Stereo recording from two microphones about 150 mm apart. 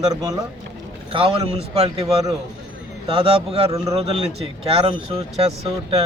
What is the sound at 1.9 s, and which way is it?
Speech, 25° right (ahead or behind).